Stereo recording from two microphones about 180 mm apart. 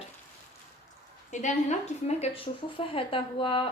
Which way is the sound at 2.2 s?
30° left (ahead or behind).